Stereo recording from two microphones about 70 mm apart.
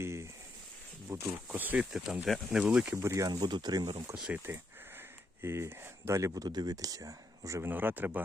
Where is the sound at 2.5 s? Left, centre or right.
Centre.